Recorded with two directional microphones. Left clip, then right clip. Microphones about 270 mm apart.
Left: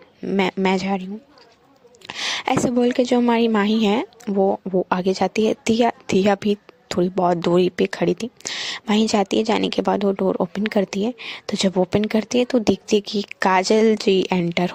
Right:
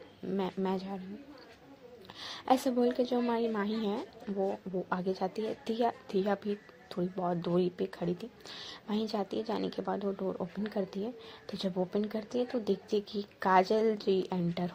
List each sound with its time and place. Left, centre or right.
0.3 s a woman's voice: left
2.0 s a woman's voice: left